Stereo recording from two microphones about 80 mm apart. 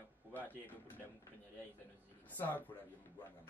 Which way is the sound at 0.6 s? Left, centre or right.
Left.